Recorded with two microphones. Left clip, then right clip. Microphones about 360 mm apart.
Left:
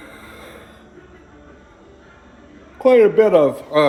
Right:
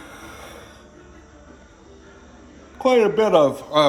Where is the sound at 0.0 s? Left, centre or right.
Centre.